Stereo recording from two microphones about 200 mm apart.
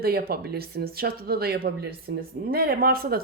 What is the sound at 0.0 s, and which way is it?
Speech, 50° right (ahead or behind).